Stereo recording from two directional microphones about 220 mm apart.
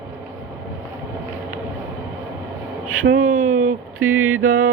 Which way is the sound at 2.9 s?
65° right (ahead or behind).